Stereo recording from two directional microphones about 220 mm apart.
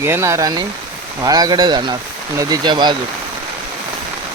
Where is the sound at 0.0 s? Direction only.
10° right (ahead or behind).